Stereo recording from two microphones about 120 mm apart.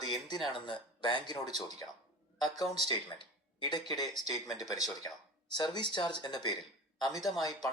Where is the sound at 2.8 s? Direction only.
40° left (ahead or behind).